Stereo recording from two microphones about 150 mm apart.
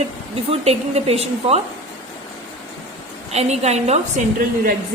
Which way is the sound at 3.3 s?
45° right (ahead or behind).